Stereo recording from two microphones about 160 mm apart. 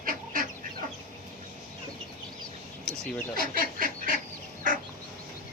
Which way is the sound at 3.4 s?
60° right (ahead or behind).